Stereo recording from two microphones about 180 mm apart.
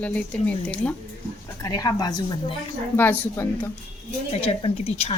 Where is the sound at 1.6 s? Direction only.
20° left (ahead or behind).